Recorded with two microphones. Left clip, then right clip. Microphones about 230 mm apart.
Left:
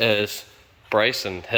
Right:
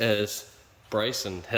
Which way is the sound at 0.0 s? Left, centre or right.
Centre.